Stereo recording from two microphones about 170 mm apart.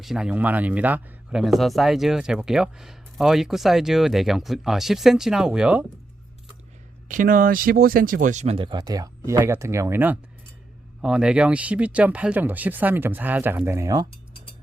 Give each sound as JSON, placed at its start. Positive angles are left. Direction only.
{"t": 0.0, "sound": "speech", "side_deg": -5}
{"t": 7.1, "sound": "speech", "side_deg": -55}